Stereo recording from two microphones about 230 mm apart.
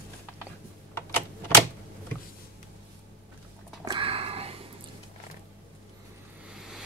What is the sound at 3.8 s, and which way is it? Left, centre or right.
Sniff, right.